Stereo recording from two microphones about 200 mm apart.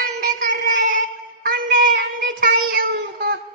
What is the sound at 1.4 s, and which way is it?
Child singing, 45° right (ahead or behind).